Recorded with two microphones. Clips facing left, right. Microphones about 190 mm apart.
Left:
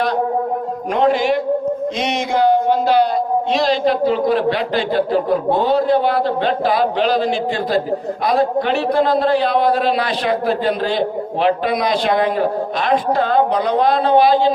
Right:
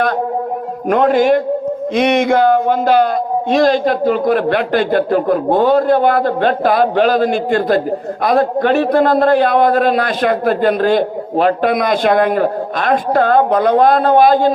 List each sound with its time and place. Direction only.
0.9 s a man's voice: 50° right (ahead or behind)